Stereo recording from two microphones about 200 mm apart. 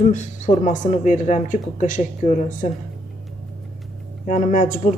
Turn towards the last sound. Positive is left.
turn(degrees=40)  # may be behind; listen again after turning